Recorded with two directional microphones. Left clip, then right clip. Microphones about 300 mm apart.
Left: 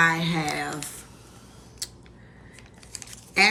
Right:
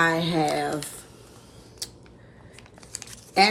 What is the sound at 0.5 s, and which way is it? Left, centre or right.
Speech, right.